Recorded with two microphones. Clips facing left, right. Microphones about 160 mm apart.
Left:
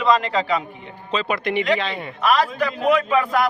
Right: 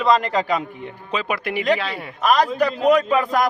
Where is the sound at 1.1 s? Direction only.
10° right (ahead or behind).